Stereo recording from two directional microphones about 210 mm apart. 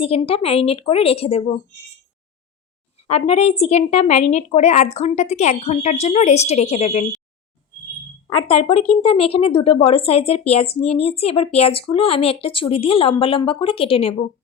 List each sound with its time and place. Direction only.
0.0 s speech: 25° left (ahead or behind)
3.0 s speech: 30° left (ahead or behind)
8.3 s speech: 25° left (ahead or behind)